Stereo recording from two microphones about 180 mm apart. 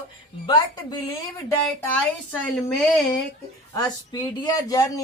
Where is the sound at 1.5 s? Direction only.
10° left (ahead or behind).